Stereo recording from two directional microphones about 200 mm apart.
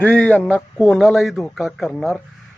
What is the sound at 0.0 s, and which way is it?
Speech, 5° left (ahead or behind).